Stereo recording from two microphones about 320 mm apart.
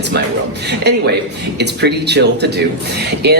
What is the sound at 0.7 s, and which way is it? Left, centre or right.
Speech, right.